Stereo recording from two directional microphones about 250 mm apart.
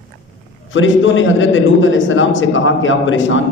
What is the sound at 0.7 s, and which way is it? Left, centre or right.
A man's voice, left.